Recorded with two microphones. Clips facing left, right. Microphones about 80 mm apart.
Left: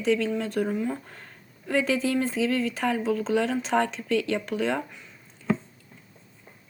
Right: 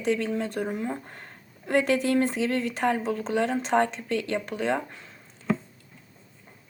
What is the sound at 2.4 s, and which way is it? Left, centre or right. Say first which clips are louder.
Speech: even; right.